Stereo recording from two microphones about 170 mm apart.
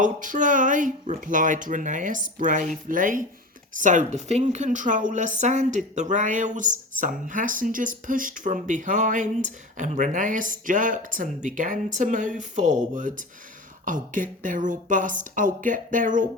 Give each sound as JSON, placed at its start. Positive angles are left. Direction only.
{"t": 0.0, "sound": "a woman's voice", "side_deg": -50}